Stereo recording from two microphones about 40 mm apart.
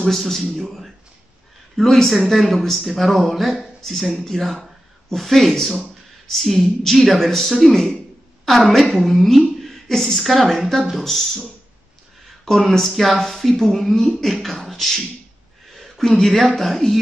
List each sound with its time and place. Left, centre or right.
0.0 s speech: centre
12.4 s speech: centre